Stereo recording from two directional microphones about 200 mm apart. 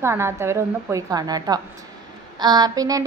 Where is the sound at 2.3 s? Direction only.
20° right (ahead or behind).